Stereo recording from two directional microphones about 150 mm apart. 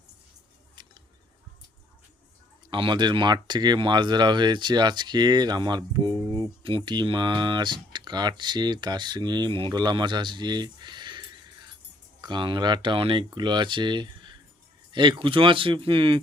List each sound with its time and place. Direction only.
2.6 s speech: 30° right (ahead or behind)
12.2 s speech: 30° right (ahead or behind)